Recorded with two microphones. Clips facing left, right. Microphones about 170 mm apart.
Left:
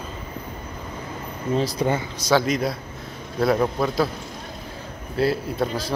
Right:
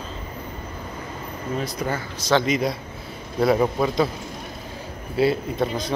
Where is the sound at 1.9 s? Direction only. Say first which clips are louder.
Right 3 dB; 15° left (ahead or behind).